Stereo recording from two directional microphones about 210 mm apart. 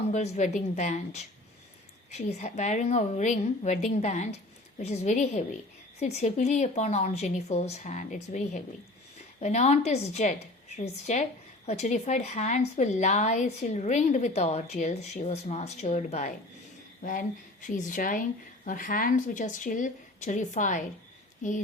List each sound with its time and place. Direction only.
0.1 s a woman's voice: 30° left (ahead or behind)